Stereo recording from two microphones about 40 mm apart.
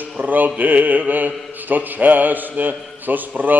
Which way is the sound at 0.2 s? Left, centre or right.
Right.